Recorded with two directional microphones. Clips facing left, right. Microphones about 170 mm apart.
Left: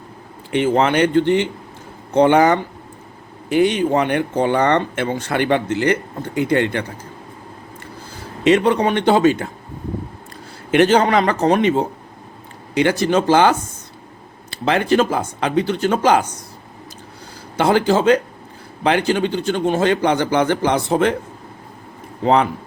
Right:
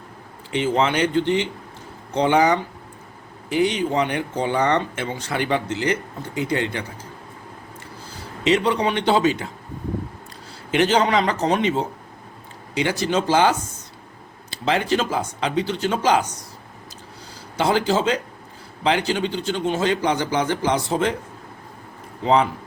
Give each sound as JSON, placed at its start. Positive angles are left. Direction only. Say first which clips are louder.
{"t": 0.5, "sound": "speech", "louder": "left 4 dB", "side_deg": 55}
{"t": 8.4, "sound": "a man's voice", "louder": "left 5 dB", "side_deg": 55}
{"t": 10.7, "sound": "a man's voice", "louder": "left 5 dB", "side_deg": 55}
{"t": 17.6, "sound": "speech", "louder": "left 4 dB", "side_deg": 55}
{"t": 22.2, "sound": "speech", "louder": "left 3 dB", "side_deg": 60}